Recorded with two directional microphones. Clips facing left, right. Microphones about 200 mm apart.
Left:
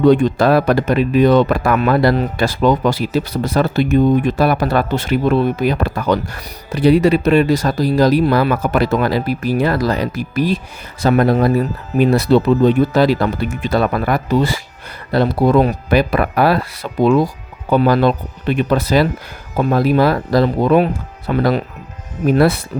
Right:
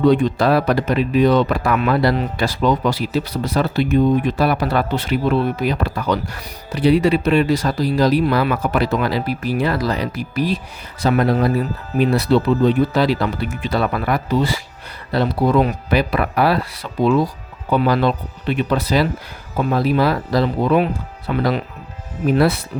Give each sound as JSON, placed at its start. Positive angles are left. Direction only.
{"t": 0.0, "sound": "speech", "side_deg": 45}